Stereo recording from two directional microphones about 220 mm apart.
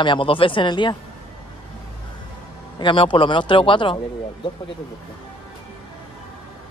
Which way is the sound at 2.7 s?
20° left (ahead or behind).